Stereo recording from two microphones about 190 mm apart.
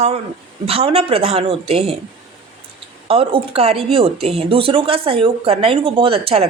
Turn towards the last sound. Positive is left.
turn(degrees=-30)  # may be behind; listen again after turning